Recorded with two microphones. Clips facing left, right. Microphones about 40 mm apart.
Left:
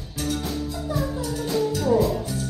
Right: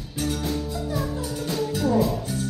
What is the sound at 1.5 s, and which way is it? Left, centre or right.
Music, centre.